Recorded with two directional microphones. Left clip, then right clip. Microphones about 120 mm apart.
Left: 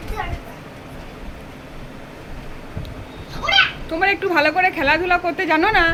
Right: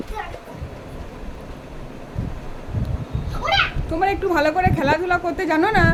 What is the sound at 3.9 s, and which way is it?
Speech, 10° right (ahead or behind).